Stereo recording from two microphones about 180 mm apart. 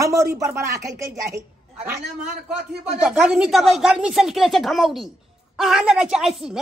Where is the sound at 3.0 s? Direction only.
5° right (ahead or behind).